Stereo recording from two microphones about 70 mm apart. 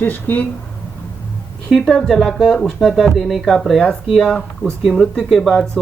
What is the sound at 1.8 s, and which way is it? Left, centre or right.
Speech, centre.